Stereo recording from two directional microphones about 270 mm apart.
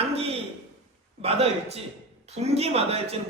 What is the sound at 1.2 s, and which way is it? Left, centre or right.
A man's voice, right.